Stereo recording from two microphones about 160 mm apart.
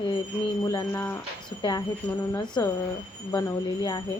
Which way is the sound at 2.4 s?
30° left (ahead or behind).